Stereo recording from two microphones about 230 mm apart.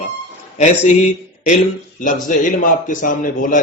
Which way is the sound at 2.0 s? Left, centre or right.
Left.